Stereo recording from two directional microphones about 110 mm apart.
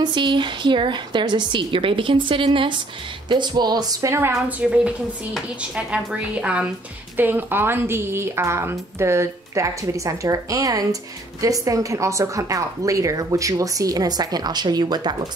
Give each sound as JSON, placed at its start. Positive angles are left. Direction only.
{"t": 0.0, "sound": "a woman's voice", "side_deg": -45}
{"t": 4.5, "sound": "a woman's voice", "side_deg": -10}